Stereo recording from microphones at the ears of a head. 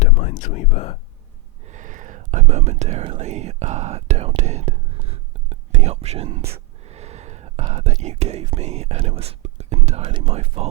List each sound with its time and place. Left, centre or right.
0.0 s whispering: left
1.6 s speech: right